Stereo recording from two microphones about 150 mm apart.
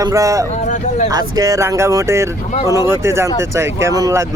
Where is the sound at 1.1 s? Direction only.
25° right (ahead or behind).